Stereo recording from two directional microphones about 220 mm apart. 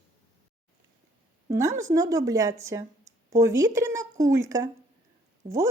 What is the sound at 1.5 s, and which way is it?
Speech, 15° right (ahead or behind).